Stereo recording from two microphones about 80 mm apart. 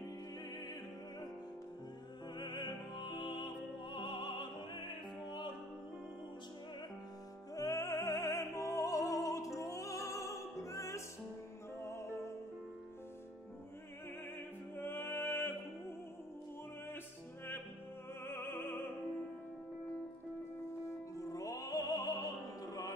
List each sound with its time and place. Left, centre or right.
2.3 s music: left
7.5 s music: left
14.8 s music: left
18.2 s music: left
20.8 s music: left